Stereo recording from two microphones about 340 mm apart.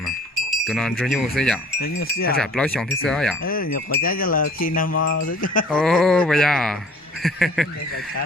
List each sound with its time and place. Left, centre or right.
0.5 s wind chime: centre
2.1 s wind chime: left
2.4 s wind chime: centre
3.4 s wind chime: left
4.9 s wind chime: left
5.7 s wind chime: centre